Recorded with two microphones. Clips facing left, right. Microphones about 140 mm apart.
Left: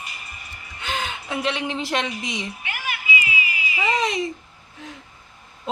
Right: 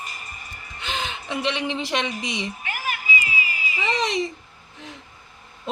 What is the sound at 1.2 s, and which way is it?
Speech, 5° left (ahead or behind).